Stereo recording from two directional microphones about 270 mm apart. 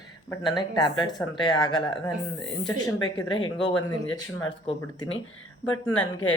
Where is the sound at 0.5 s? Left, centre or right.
Centre.